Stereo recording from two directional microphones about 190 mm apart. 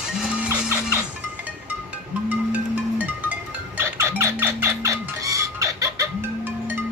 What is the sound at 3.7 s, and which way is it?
Music, 15° right (ahead or behind).